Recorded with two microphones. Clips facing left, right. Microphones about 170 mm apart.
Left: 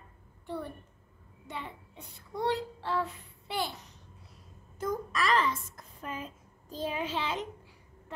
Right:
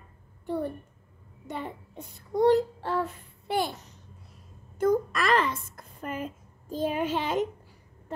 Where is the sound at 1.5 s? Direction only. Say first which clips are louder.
Right 6 dB; 45° right (ahead or behind).